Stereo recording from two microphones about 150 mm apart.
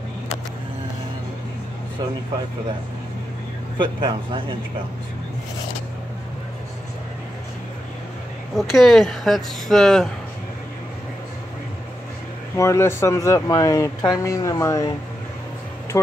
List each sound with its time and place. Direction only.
3.7 s a man's voice: 30° right (ahead or behind)
8.5 s speech: centre (ahead or behind)
12.5 s speech: 20° left (ahead or behind)